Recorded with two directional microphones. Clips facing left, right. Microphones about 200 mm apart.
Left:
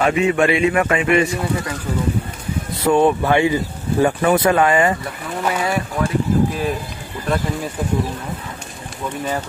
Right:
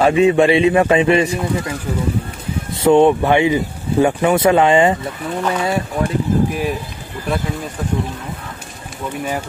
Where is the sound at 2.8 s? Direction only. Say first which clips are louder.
Right 4 dB; 20° right (ahead or behind).